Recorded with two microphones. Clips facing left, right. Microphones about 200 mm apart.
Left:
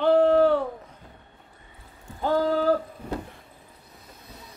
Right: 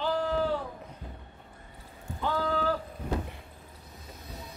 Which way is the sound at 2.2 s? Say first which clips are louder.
Left 7 dB; 40° left (ahead or behind).